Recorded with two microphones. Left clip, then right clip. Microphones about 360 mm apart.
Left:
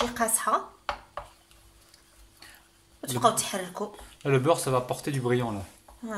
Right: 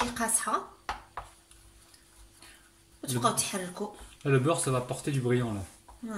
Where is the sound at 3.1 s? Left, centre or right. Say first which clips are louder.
Left 5 dB; centre.